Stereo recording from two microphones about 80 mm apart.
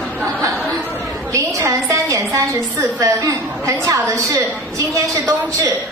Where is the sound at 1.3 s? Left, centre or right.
Right.